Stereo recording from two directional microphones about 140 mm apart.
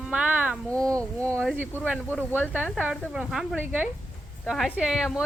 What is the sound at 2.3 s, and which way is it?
A woman's voice, 10° right (ahead or behind).